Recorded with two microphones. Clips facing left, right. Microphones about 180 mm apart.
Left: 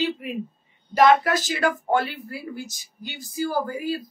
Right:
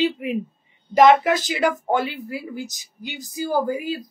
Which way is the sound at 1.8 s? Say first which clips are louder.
Right 1 dB; 15° right (ahead or behind).